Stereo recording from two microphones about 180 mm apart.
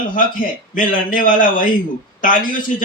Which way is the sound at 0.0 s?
50° left (ahead or behind).